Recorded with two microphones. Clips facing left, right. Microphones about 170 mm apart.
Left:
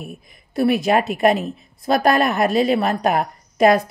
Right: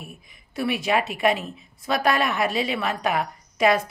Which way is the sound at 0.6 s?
40° left (ahead or behind).